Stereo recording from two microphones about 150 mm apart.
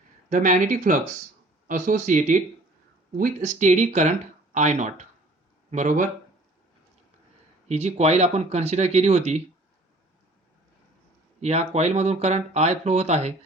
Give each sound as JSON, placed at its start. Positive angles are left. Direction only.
{"t": 0.3, "sound": "speech", "side_deg": -60}
{"t": 7.7, "sound": "speech", "side_deg": -45}
{"t": 11.3, "sound": "speech", "side_deg": -45}